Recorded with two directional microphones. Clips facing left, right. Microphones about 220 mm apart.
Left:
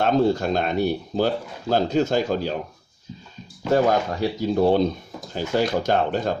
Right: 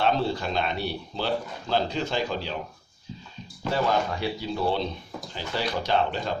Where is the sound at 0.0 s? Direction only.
45° left (ahead or behind).